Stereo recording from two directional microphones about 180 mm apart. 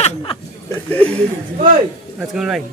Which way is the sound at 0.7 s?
10° left (ahead or behind).